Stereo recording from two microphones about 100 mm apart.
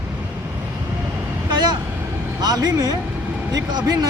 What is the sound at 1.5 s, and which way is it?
Vehicle, 45° right (ahead or behind).